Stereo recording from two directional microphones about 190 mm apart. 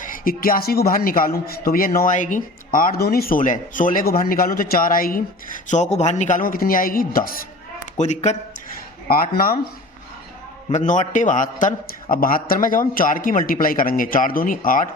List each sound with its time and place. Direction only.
0.0 s a man's voice: 50° left (ahead or behind)
5.6 s a man's voice: 40° left (ahead or behind)
7.9 s a man's voice: 40° left (ahead or behind)
9.0 s a man's voice: 50° left (ahead or behind)
10.7 s a man's voice: 40° left (ahead or behind)